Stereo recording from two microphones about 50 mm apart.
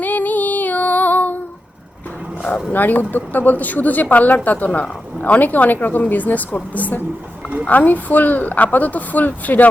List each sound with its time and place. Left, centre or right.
0.0 s female singing: left
2.7 s a woman's voice: left